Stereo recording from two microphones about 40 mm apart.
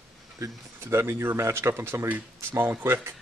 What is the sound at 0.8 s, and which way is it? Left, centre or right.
Speech, right.